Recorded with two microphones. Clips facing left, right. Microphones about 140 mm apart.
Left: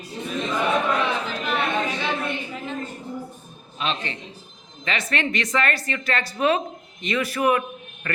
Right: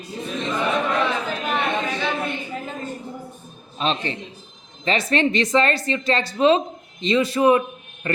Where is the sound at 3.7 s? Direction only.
35° right (ahead or behind).